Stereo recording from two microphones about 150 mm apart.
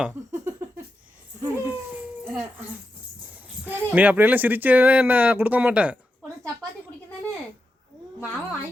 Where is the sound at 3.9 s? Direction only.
10° right (ahead or behind).